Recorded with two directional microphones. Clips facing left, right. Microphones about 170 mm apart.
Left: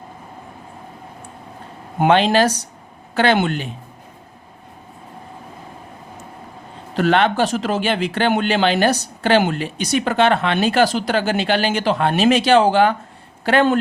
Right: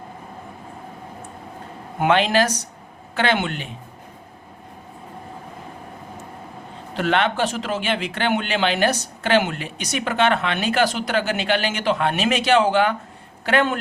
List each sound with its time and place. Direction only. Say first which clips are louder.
2.0 s speech: left 3 dB; 30° left (ahead or behind)
6.9 s speech: left 4 dB; 40° left (ahead or behind)